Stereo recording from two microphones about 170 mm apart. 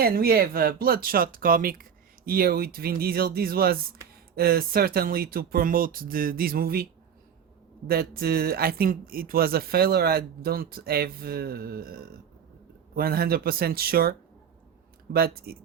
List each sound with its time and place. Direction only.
0.0 s speech: 65° right (ahead or behind)
7.9 s speech: 65° right (ahead or behind)